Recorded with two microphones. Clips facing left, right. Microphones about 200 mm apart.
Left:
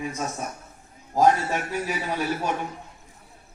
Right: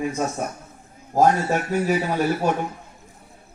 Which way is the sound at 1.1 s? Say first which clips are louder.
Right 2 dB; 45° right (ahead or behind).